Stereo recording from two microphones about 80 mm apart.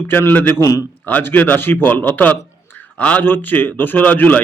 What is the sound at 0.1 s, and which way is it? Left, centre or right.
Speech, left.